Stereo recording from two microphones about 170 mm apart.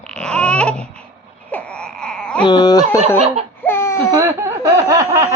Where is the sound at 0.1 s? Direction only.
5° left (ahead or behind).